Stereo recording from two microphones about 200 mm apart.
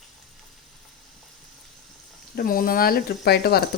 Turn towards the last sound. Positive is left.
turn(degrees=55)  # may be behind; listen again after turning